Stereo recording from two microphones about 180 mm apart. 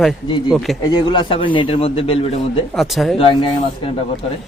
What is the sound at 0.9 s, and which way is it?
A man's voice, 25° left (ahead or behind).